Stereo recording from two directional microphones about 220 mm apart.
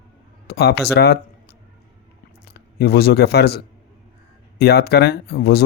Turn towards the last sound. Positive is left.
turn(degrees=45)  # may be behind; listen again after turning